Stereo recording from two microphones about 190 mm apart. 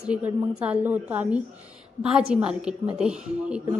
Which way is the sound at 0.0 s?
5° right (ahead or behind).